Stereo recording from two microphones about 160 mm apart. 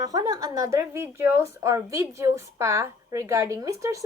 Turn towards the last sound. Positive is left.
turn(degrees=-20)  # may be behind; listen again after turning